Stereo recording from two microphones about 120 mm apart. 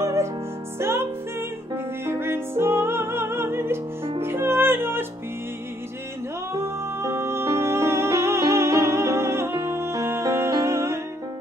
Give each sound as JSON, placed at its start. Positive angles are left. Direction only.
{"t": 0.0, "sound": "music", "side_deg": -25}
{"t": 2.0, "sound": "music", "side_deg": -20}
{"t": 6.5, "sound": "music", "side_deg": -20}